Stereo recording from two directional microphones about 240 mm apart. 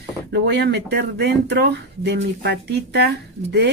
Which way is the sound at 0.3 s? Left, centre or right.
Right.